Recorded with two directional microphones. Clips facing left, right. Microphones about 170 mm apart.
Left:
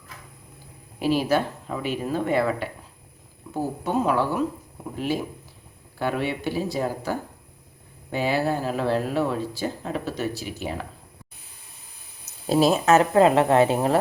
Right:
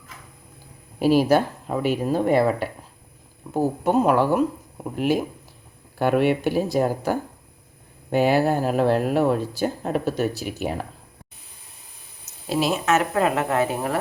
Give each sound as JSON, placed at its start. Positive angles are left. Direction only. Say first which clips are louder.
{"t": 1.3, "sound": "speech", "louder": "right 4 dB", "side_deg": -45}
{"t": 12.5, "sound": "speech", "louder": "left 3 dB", "side_deg": 40}